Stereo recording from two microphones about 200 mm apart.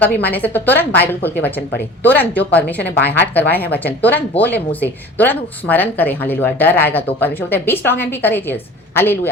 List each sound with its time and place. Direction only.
0.0 s speech: 10° left (ahead or behind)